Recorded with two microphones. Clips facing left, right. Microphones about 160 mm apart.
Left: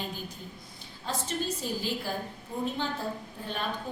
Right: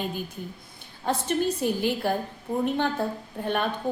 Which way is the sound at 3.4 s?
60° right (ahead or behind).